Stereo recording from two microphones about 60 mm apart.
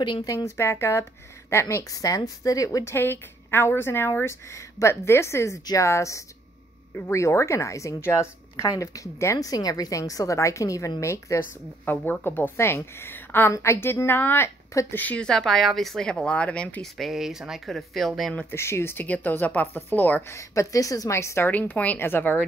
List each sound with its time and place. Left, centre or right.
0.2 s speech: left
0.5 s speech: left
1.9 s a woman's voice: left
2.8 s a woman's voice: left
8.5 s a woman's voice: left
11.3 s a woman's voice: left
13.5 s a woman's voice: left
14.7 s a woman's voice: left
15.1 s speech: centre
16.8 s speech: centre
18.5 s speech: left
19.0 s speech: left
20.2 s a woman's voice: left
21.5 s a woman's voice: left